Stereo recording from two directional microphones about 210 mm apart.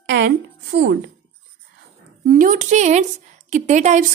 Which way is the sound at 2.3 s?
40° right (ahead or behind).